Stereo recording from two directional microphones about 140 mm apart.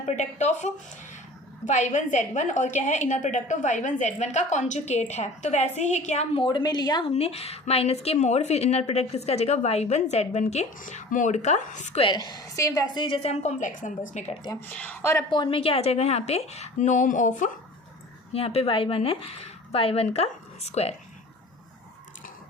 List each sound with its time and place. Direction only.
0.0 s a woman's voice: 55° left (ahead or behind)
6.4 s a woman's voice: 35° left (ahead or behind)
7.1 s a woman's voice: 45° left (ahead or behind)
11.9 s a woman's voice: 35° left (ahead or behind); by 14.3 s 60° left (ahead or behind)
14.7 s speech: 10° left (ahead or behind)
15.3 s a woman's voice: 35° left (ahead or behind); by 17.5 s 65° left (ahead or behind)
18.3 s a woman's voice: 45° left (ahead or behind)